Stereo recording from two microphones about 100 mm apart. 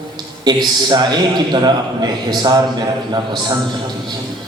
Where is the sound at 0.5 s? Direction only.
45° right (ahead or behind).